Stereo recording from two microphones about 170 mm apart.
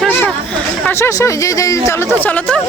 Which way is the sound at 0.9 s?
15° left (ahead or behind).